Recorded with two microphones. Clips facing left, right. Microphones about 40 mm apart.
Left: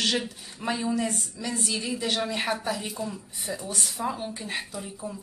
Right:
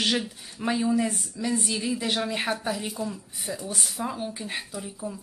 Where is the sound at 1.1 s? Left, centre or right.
Centre.